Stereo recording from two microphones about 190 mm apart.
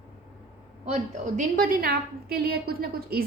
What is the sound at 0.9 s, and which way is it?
A woman's voice, 40° right (ahead or behind).